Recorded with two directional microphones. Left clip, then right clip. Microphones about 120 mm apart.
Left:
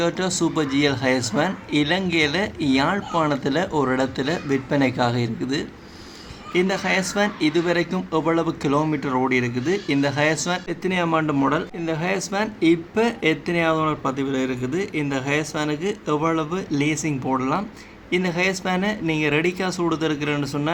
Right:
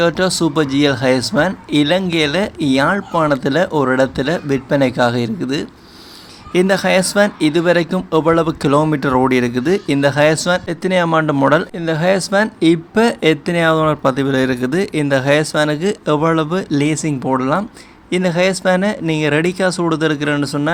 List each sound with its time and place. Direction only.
0.0 s speech: 30° right (ahead or behind)
6.5 s speech: 40° right (ahead or behind)
8.9 s speech: 55° right (ahead or behind)
11.4 s speech: 55° right (ahead or behind); by 20.7 s 40° right (ahead or behind)